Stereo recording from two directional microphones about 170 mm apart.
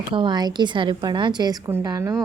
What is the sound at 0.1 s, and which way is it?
Speech, 25° right (ahead or behind).